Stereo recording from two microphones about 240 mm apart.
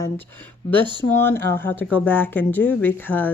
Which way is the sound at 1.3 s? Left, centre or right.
Centre.